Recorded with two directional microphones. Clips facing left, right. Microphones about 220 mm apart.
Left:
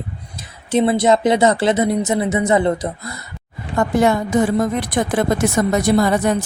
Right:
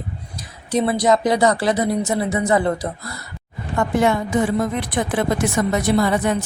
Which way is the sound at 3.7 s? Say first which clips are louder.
Left 2 dB; 40° left (ahead or behind).